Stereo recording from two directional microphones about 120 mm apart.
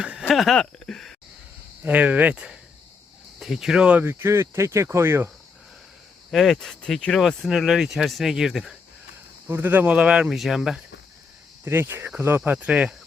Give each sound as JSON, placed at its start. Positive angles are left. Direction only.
{"t": 0.0, "sound": "speech", "side_deg": -5}
{"t": 1.8, "sound": "speech", "side_deg": -10}
{"t": 6.3, "sound": "speech", "side_deg": 0}
{"t": 9.5, "sound": "speech", "side_deg": -15}
{"t": 11.6, "sound": "speech", "side_deg": -20}